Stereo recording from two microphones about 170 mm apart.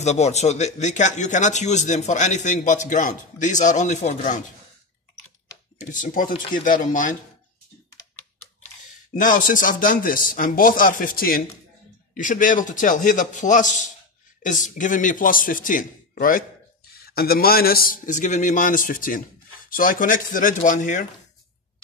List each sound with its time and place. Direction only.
0.0 s a man's voice: 40° left (ahead or behind)
5.8 s a man's voice: 50° left (ahead or behind)
9.1 s a man's voice: 50° left (ahead or behind)